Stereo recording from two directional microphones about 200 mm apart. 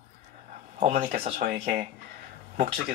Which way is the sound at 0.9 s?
50° right (ahead or behind).